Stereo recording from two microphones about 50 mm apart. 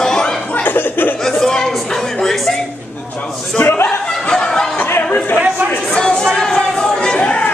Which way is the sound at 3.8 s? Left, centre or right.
Centre.